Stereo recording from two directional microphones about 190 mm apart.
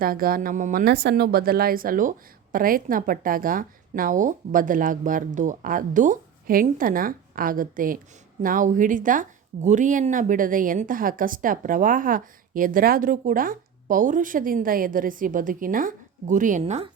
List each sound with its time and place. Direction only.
0.0 s speech: 50° right (ahead or behind)